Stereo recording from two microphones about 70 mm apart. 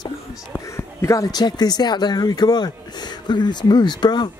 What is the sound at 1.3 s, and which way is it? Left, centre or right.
Speech, left.